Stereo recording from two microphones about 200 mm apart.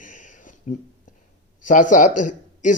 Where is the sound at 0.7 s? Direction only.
40° left (ahead or behind).